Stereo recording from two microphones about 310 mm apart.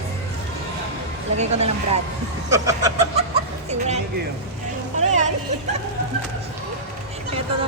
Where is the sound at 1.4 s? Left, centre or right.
Right.